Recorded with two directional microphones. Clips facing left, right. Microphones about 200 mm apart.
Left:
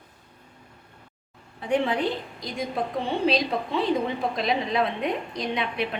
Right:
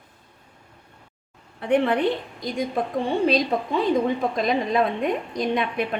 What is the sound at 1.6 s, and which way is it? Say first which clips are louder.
Speech: right 4 dB; 60° right (ahead or behind).